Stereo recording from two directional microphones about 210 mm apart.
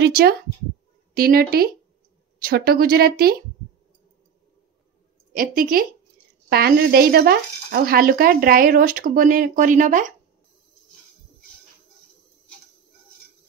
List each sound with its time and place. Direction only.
0.0 s speech: 45° right (ahead or behind)
5.3 s speech: 40° right (ahead or behind)